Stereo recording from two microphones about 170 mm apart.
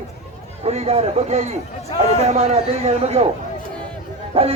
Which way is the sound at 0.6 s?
35° right (ahead or behind).